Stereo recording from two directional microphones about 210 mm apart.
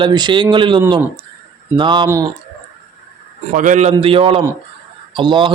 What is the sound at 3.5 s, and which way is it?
A man's voice, 35° right (ahead or behind).